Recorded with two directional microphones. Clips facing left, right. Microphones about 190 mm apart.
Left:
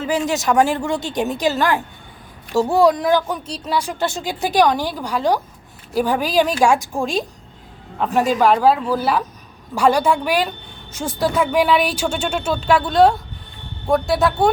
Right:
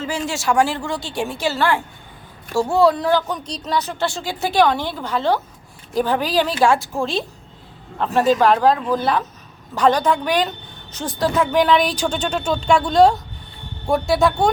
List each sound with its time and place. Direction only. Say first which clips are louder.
0.0 s a woman's voice: left 4 dB; 15° left (ahead or behind)